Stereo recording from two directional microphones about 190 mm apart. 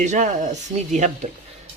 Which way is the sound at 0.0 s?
40° right (ahead or behind).